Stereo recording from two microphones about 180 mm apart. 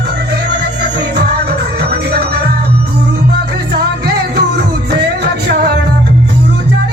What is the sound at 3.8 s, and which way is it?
Music, 65° right (ahead or behind).